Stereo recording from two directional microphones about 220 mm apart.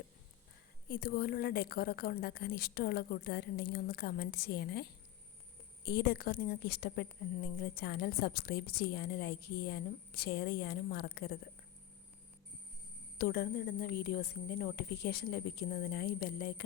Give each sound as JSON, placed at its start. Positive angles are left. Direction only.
{"t": 0.9, "sound": "a woman's voice", "side_deg": 45}
{"t": 13.1, "sound": "a woman's voice", "side_deg": 45}